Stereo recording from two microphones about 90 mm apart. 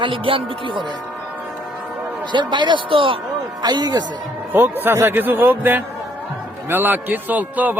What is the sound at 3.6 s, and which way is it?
Speech, 50° right (ahead or behind).